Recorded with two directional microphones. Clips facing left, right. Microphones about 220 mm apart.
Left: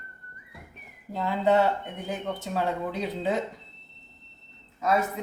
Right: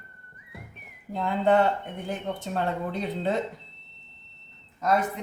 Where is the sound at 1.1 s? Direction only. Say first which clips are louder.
Right 1 dB; 5° left (ahead or behind).